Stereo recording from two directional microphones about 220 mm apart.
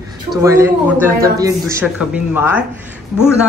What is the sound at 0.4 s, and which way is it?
A woman's voice, 15° right (ahead or behind).